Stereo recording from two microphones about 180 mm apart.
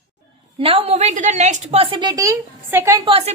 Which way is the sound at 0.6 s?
30° right (ahead or behind).